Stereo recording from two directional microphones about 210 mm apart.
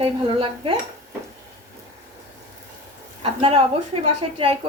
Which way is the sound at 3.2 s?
25° right (ahead or behind).